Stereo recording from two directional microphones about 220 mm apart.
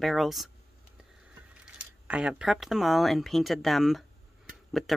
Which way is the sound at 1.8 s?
5° right (ahead or behind).